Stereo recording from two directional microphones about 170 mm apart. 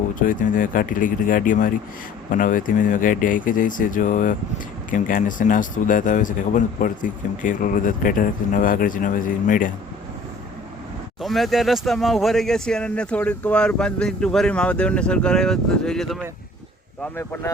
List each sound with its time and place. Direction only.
0.2 s a man's voice: 50° left (ahead or behind)
11.2 s speech: centre (ahead or behind)
17.0 s speech: 15° left (ahead or behind)